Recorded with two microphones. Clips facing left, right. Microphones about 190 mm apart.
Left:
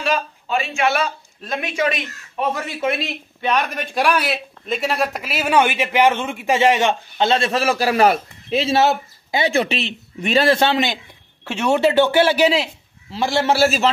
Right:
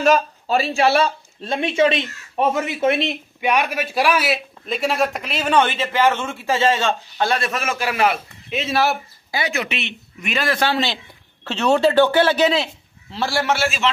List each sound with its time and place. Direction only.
0.0 s a man's voice: 40° right (ahead or behind); by 12.1 s 20° left (ahead or behind)
12.1 s a man's voice: 10° left (ahead or behind)
13.5 s a man's voice: 35° left (ahead or behind)